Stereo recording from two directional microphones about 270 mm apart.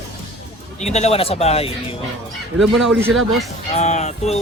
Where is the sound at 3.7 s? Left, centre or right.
Left.